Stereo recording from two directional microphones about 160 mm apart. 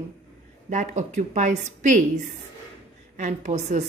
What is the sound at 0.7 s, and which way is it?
A woman's voice, 50° right (ahead or behind).